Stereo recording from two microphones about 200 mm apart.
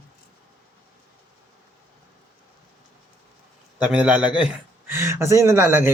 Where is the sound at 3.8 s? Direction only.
5° right (ahead or behind).